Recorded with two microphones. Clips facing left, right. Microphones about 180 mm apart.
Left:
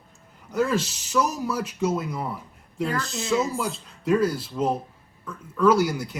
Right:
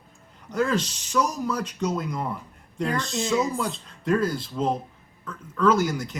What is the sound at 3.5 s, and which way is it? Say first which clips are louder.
Speech: even; 5° left (ahead or behind).